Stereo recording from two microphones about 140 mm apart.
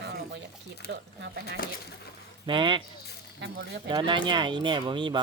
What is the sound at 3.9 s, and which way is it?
Speech, 35° right (ahead or behind).